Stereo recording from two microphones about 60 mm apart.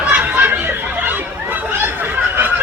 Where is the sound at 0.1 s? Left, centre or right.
Right.